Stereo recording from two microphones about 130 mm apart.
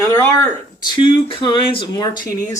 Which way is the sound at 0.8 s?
40° left (ahead or behind).